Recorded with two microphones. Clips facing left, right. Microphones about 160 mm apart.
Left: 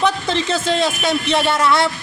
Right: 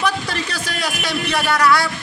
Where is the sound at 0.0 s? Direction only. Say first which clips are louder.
Left 4 dB; 25° left (ahead or behind).